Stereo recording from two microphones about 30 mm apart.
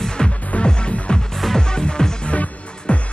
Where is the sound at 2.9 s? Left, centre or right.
Left.